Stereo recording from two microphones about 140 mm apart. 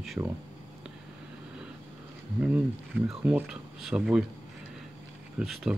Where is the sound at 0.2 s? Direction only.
20° right (ahead or behind).